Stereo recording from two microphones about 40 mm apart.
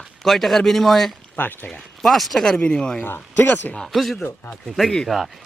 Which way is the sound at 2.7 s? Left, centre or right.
Left.